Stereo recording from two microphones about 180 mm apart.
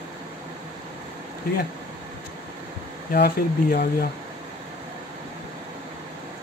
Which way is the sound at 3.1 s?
60° left (ahead or behind).